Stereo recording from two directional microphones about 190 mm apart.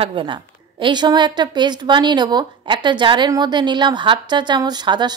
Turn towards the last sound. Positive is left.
turn(degrees=-25)  # may be behind; listen again after turning